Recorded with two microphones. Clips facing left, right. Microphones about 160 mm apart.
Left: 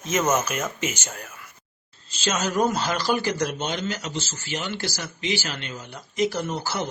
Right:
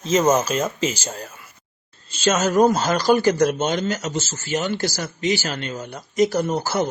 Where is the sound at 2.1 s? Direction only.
50° right (ahead or behind).